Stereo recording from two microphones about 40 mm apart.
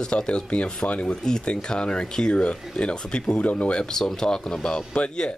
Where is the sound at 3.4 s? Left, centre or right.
Left.